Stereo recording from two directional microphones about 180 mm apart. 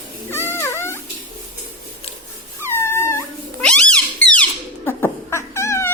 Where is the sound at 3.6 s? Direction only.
5° left (ahead or behind).